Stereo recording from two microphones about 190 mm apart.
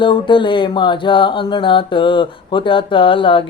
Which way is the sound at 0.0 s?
25° left (ahead or behind).